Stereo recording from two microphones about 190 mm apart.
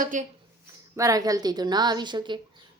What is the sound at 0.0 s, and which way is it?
Speech, 45° right (ahead or behind).